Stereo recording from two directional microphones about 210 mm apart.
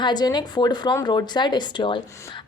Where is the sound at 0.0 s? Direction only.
20° left (ahead or behind).